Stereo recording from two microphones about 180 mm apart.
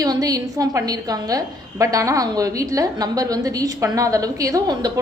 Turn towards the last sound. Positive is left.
turn(degrees=-20)  # may be behind; listen again after turning